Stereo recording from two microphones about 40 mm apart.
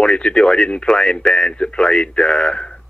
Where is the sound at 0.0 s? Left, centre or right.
Left.